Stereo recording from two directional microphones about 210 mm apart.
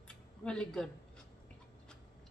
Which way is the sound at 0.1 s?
5° left (ahead or behind).